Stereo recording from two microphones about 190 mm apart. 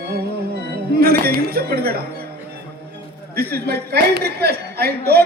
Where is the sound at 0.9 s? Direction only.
55° right (ahead or behind).